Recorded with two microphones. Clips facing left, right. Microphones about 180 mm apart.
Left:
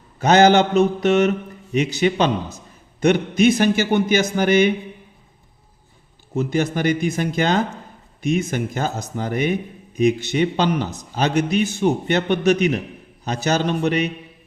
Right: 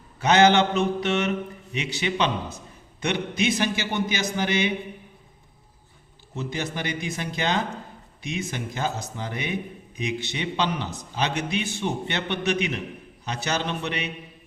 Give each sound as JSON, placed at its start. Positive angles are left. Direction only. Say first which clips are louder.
{"t": 0.2, "sound": "a man's voice", "louder": "left 4 dB", "side_deg": 40}
{"t": 6.3, "sound": "a man's voice", "louder": "left 9 dB", "side_deg": 50}